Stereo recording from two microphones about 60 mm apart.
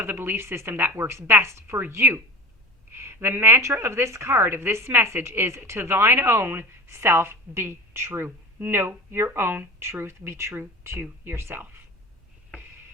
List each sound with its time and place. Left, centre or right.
0.0 s a woman's voice: right